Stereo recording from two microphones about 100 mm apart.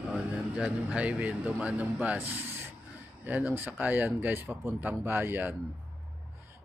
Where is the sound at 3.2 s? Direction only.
20° right (ahead or behind).